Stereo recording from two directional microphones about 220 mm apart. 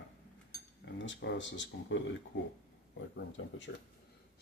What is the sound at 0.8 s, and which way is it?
Speech, 50° left (ahead or behind).